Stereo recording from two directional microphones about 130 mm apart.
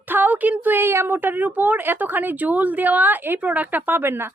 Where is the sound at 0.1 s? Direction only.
15° right (ahead or behind).